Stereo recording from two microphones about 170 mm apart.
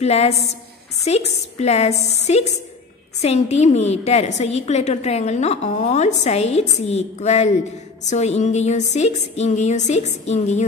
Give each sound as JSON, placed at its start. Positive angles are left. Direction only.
{"t": 0.0, "sound": "a woman's voice", "side_deg": 40}